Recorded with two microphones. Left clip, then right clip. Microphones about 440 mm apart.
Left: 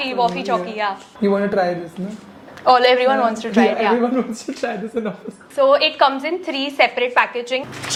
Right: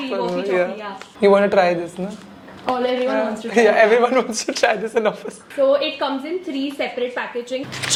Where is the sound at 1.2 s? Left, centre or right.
Right.